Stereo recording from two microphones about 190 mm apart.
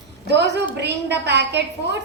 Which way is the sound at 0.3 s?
65° right (ahead or behind).